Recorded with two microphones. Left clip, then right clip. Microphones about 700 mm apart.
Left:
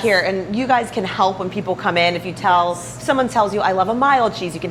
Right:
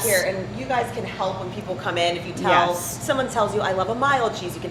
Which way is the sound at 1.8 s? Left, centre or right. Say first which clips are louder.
Left 5 dB; left.